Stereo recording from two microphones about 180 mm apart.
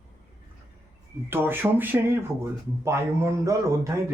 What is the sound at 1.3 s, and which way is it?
Speech, 10° right (ahead or behind).